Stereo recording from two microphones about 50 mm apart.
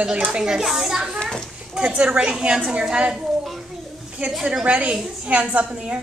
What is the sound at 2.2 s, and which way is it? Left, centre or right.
Speech, centre.